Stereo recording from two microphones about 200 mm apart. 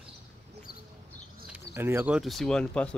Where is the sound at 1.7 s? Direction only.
10° right (ahead or behind).